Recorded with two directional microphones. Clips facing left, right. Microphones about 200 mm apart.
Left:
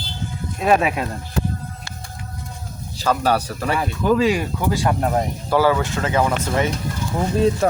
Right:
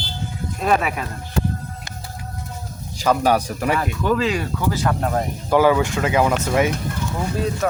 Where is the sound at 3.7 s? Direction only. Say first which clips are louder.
Left 2 dB; 10° left (ahead or behind).